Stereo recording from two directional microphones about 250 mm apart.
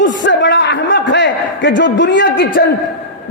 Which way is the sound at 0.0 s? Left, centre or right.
Left.